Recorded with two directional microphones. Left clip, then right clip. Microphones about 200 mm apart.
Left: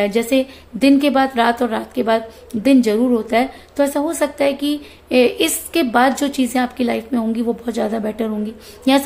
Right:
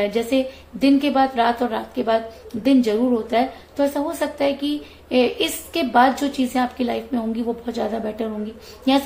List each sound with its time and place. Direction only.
0.0 s a woman's voice: 35° left (ahead or behind)